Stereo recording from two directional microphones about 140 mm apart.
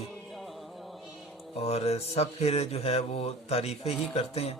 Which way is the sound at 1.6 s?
45° left (ahead or behind).